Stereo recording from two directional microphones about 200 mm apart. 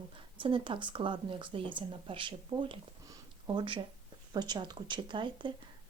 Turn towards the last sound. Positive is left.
turn(degrees=-25)  # may be behind; listen again after turning